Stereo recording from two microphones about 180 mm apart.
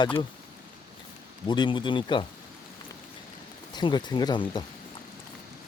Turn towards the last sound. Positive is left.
turn(degrees=25)  # may be behind; listen again after turning